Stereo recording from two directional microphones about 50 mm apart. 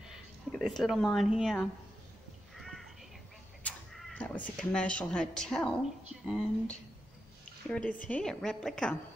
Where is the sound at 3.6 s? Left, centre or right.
Left.